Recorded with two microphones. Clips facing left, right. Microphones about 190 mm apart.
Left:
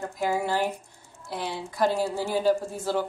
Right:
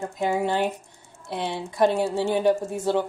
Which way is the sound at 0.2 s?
20° right (ahead or behind).